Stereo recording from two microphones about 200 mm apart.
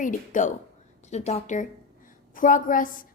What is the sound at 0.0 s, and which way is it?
A woman's voice, 40° left (ahead or behind).